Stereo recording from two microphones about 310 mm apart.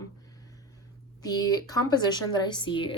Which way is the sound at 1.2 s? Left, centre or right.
Centre.